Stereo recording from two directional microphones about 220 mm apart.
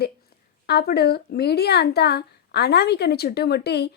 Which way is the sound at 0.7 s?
45° left (ahead or behind).